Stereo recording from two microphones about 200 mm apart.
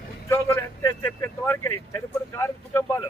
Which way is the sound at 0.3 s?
10° left (ahead or behind).